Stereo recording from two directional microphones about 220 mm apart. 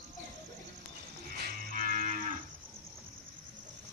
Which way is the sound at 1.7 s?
40° right (ahead or behind).